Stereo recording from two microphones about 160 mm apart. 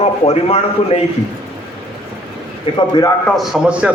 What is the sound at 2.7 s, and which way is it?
Speech, 30° left (ahead or behind).